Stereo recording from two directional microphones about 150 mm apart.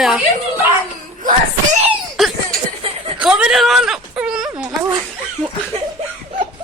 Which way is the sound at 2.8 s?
40° right (ahead or behind).